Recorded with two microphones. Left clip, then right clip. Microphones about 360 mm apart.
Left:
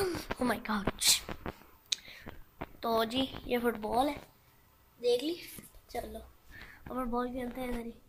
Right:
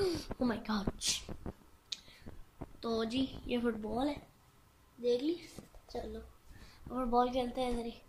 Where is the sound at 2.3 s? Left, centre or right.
Left.